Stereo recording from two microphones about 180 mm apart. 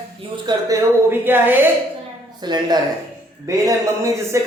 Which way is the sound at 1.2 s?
10° right (ahead or behind).